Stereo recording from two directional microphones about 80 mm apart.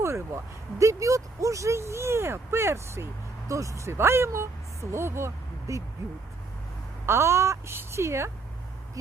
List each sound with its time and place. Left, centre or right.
0.0 s speech: right
7.0 s speech: right